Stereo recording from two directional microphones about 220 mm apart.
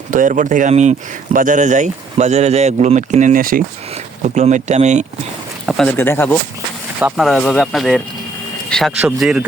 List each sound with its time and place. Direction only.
0.1 s speech: 35° right (ahead or behind)
5.6 s speech: centre (ahead or behind)
7.0 s speech: centre (ahead or behind)